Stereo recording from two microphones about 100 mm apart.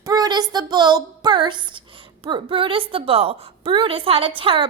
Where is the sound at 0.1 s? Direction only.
40° right (ahead or behind).